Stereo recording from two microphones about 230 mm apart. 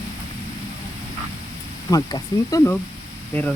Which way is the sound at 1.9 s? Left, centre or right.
Centre.